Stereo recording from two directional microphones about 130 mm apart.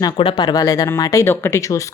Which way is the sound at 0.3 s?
30° left (ahead or behind).